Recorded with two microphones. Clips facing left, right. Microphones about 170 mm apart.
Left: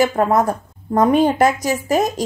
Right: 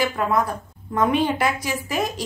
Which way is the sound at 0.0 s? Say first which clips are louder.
Left 6 dB; 45° left (ahead or behind).